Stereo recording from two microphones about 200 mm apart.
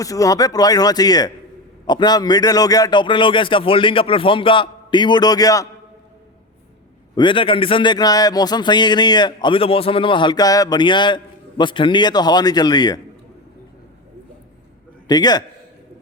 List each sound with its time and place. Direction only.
0.0 s a man's voice: 15° left (ahead or behind)
7.2 s a man's voice: 25° left (ahead or behind)
15.0 s a man's voice: 20° left (ahead or behind)